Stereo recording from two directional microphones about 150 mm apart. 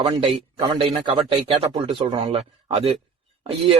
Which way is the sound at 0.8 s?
30° right (ahead or behind).